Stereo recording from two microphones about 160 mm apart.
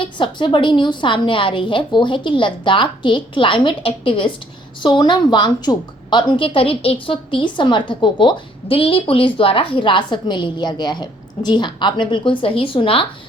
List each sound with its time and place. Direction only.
0.0 s a woman's voice: 30° left (ahead or behind)